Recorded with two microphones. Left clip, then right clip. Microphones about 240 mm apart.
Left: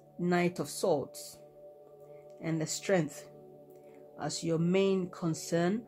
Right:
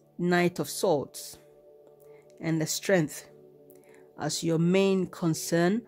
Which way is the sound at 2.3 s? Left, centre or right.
Right.